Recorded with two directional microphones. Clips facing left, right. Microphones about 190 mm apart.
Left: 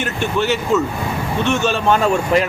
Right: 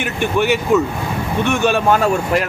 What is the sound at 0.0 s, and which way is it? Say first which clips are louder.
Speech: right 2 dB; 15° right (ahead or behind).